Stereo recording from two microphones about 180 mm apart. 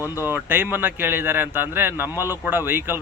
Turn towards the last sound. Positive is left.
turn(degrees=-10)  # may be behind; listen again after turning